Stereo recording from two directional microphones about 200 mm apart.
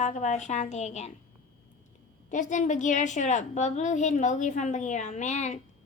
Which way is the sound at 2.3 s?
40° left (ahead or behind).